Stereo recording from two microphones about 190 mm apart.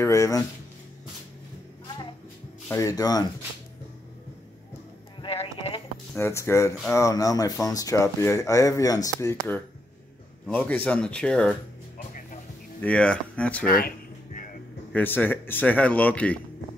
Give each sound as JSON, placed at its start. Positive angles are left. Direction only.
{"t": 0.0, "sound": "speech", "side_deg": 15}
{"t": 2.7, "sound": "speech", "side_deg": 20}
{"t": 5.2, "sound": "a sound", "side_deg": 30}
{"t": 6.1, "sound": "speech", "side_deg": 15}
{"t": 12.8, "sound": "speech", "side_deg": 5}
{"t": 13.7, "sound": "music", "side_deg": 50}
{"t": 14.9, "sound": "speech", "side_deg": 10}